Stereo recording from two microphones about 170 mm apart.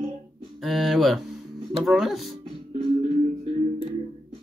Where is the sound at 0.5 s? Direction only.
Centre (ahead or behind).